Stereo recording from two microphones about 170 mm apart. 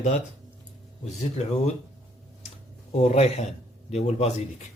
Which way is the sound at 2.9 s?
40° left (ahead or behind).